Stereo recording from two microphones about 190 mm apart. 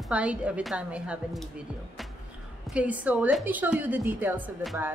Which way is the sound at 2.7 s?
10° right (ahead or behind).